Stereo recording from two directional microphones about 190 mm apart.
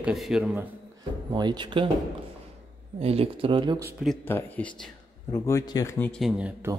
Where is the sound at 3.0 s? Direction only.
30° right (ahead or behind).